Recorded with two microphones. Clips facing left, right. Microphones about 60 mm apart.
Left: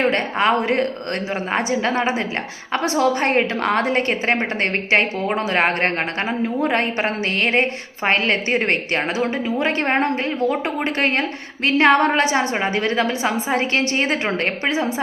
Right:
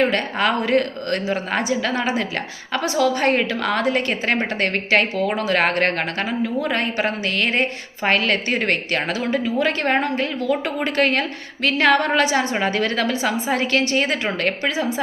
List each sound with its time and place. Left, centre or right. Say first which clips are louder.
0.0 s a woman's voice: left 1 dB; left